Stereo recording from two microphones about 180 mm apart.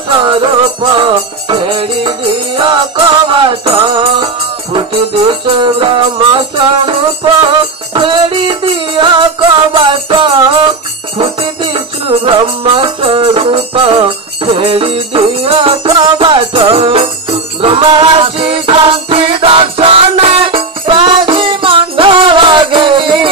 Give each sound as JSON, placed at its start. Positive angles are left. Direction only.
{"t": 0.1, "sound": "music", "side_deg": -30}
{"t": 7.9, "sound": "music", "side_deg": -30}
{"t": 12.1, "sound": "music", "side_deg": -30}